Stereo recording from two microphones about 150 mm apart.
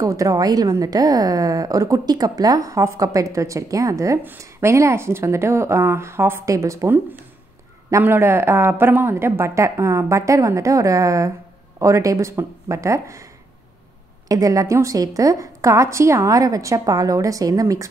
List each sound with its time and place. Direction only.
0.0 s a woman's voice: 20° right (ahead or behind)